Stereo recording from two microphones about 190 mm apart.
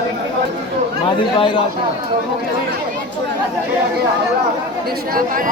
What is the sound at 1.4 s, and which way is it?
Speech, 25° left (ahead or behind).